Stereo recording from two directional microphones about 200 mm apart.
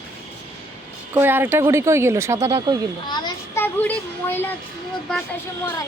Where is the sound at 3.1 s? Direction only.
20° left (ahead or behind).